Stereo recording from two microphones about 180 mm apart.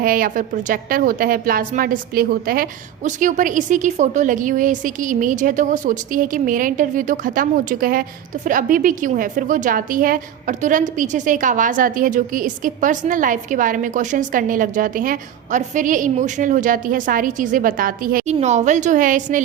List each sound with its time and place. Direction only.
0.0 s a woman's voice: 50° right (ahead or behind)
18.3 s a woman's voice: 40° right (ahead or behind)